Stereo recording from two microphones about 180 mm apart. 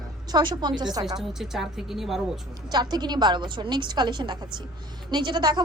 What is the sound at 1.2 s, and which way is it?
A woman's voice, centre (ahead or behind).